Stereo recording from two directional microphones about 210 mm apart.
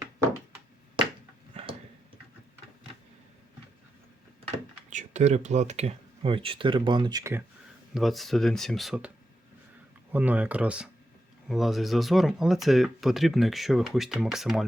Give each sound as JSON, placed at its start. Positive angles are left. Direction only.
{"t": 4.4, "sound": "speech", "side_deg": -35}
{"t": 7.9, "sound": "speech", "side_deg": 0}